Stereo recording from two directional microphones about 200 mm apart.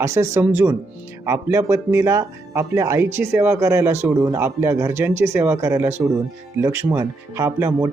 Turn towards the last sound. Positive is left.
turn(degrees=-15)  # may be behind; listen again after turning